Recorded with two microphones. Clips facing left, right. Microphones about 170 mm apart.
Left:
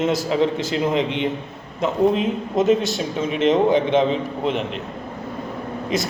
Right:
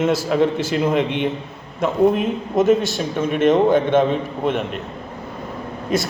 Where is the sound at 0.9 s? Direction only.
60° right (ahead or behind).